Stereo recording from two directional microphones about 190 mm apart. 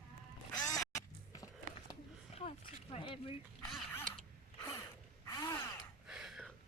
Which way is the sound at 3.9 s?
10° left (ahead or behind).